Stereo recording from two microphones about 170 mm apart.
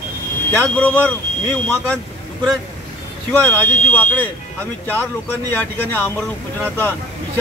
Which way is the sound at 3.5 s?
10° left (ahead or behind).